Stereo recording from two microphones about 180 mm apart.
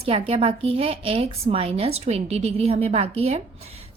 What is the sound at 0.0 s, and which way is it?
A woman's voice, 35° right (ahead or behind).